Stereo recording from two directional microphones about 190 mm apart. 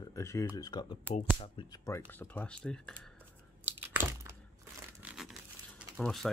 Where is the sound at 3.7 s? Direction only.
10° right (ahead or behind).